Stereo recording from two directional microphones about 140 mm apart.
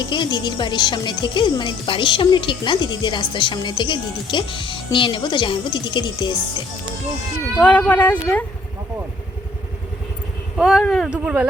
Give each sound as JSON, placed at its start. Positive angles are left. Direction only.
{"t": 0.0, "sound": "speech", "side_deg": 30}
{"t": 7.6, "sound": "speech", "side_deg": 10}
{"t": 10.6, "sound": "speech", "side_deg": 0}